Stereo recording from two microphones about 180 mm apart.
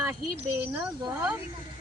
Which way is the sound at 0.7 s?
10° right (ahead or behind).